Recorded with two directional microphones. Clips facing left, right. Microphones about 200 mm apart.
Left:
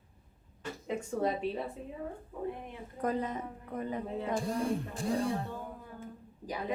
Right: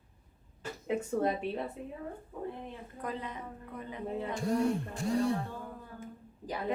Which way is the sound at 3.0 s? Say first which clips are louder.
Left 6 dB; 45° left (ahead or behind).